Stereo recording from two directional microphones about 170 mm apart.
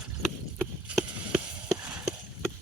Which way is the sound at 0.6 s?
10° right (ahead or behind).